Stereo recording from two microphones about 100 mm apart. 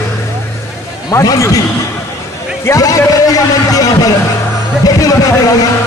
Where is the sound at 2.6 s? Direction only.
35° left (ahead or behind).